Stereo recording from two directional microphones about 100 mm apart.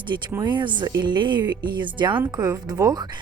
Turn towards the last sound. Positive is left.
turn(degrees=-40)  # may be behind; listen again after turning